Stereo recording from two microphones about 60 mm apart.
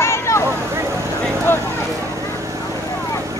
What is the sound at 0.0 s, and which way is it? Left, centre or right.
Boat, left.